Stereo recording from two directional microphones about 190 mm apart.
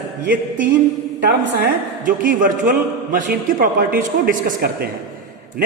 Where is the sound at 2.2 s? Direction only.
45° right (ahead or behind).